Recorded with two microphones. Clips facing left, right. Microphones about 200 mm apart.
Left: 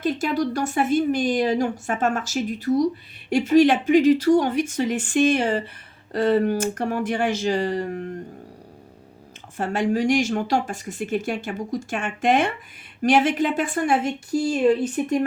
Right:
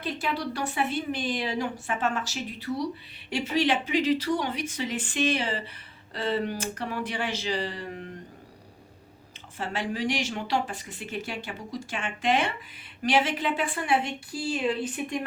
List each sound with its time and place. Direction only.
0.0 s speech: 45° left (ahead or behind)
9.6 s speech: 45° left (ahead or behind)